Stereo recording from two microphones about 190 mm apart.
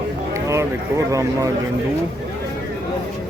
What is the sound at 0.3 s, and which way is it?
Speech, 15° right (ahead or behind).